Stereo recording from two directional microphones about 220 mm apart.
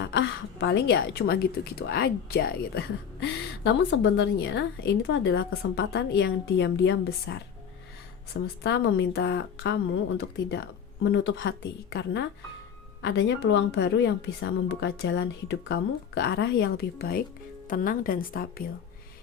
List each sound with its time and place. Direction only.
0.0 s a woman's voice: 55° left (ahead or behind)